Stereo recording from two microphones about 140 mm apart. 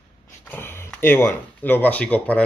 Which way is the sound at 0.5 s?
15° left (ahead or behind).